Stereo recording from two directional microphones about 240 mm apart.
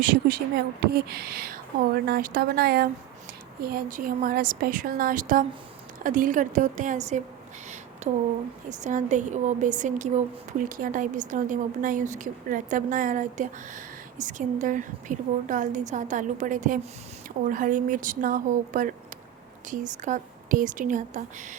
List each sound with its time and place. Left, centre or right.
0.0 s a woman's voice: right